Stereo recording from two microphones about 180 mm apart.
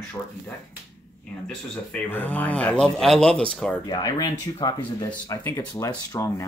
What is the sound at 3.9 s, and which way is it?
Speech, 20° left (ahead or behind).